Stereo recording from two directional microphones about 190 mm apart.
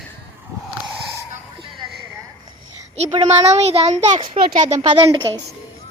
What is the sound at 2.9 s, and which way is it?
A child's voice, 35° right (ahead or behind).